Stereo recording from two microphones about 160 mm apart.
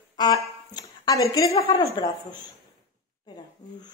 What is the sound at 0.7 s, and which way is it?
Speech, 20° left (ahead or behind).